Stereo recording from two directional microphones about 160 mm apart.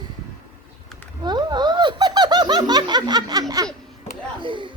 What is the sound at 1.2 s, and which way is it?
Laughter, 25° right (ahead or behind).